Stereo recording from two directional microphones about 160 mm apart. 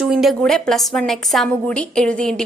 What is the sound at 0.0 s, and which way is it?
A woman's voice, centre (ahead or behind).